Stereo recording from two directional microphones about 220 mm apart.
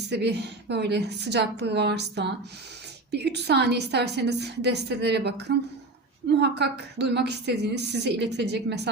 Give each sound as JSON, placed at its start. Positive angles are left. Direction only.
{"t": 0.1, "sound": "a woman's voice", "side_deg": -50}